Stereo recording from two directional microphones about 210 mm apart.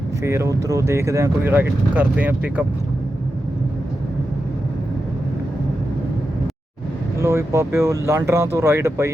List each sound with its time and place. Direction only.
0.2 s speech: 15° right (ahead or behind)
7.2 s speech: 15° right (ahead or behind)